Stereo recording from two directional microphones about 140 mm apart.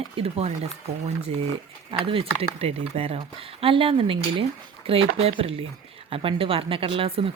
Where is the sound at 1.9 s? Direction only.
40° right (ahead or behind).